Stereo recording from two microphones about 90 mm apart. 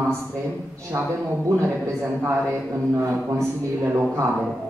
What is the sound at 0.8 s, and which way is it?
A man's voice, 30° right (ahead or behind).